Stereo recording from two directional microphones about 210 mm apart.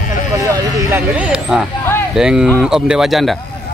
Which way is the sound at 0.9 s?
5° right (ahead or behind).